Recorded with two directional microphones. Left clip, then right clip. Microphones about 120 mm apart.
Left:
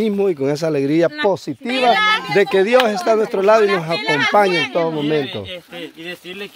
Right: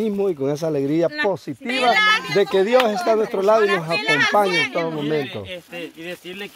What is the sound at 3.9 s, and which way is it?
Speech, 15° right (ahead or behind).